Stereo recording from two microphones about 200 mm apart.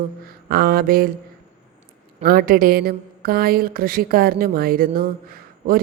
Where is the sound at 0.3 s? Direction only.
50° right (ahead or behind).